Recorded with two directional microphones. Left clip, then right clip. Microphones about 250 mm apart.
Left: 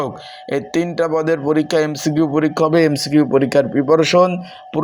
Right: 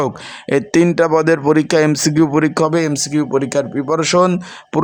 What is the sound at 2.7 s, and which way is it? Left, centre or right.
Speech, centre.